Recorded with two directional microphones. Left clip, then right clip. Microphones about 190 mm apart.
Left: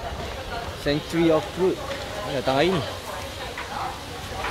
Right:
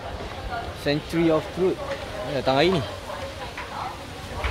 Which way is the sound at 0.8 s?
20° right (ahead or behind).